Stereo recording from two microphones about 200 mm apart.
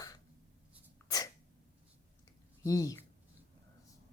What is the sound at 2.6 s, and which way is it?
Speech, 15° left (ahead or behind).